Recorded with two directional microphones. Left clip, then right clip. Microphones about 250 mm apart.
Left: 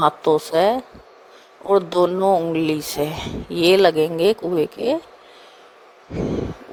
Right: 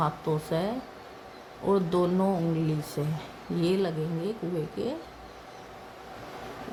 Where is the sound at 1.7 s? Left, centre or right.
Left.